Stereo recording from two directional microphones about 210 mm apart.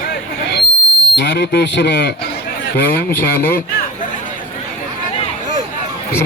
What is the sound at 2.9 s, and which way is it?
Speech, 10° left (ahead or behind).